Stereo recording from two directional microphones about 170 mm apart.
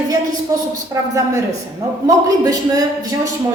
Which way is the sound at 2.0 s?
20° right (ahead or behind).